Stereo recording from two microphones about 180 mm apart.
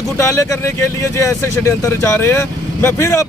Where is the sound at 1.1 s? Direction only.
15° left (ahead or behind).